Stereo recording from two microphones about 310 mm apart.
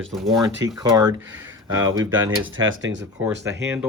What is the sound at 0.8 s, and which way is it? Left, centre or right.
Speech, centre.